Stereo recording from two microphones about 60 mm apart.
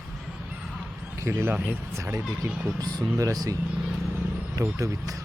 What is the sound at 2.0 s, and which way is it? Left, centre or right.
Speech, right.